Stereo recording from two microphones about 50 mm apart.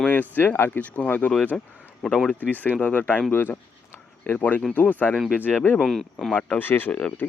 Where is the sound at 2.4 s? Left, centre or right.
Left.